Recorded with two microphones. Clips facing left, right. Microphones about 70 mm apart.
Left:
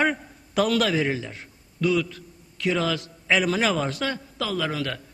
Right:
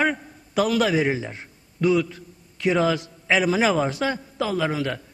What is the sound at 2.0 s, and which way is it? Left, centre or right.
A man's voice, centre.